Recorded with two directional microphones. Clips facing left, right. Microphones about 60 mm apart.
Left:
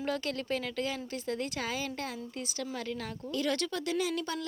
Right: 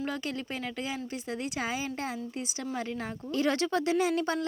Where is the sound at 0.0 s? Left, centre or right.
Centre.